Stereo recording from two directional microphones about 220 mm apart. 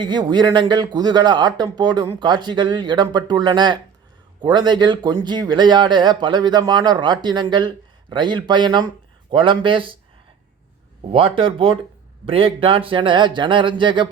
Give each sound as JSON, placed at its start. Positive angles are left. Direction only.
{"t": 0.0, "sound": "speech", "side_deg": -20}
{"t": 11.1, "sound": "speech", "side_deg": -25}